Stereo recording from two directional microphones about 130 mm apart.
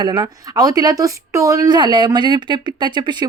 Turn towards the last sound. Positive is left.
turn(degrees=-35)  # may be behind; listen again after turning